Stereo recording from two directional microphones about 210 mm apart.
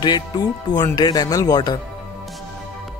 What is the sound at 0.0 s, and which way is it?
Speech, 20° left (ahead or behind).